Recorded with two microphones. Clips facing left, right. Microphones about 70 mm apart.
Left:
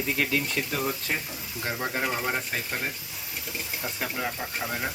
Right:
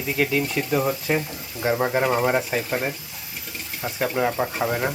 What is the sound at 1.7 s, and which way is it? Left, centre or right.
Speech, right.